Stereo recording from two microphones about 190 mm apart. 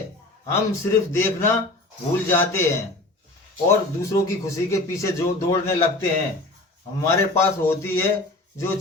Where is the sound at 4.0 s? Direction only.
15° left (ahead or behind).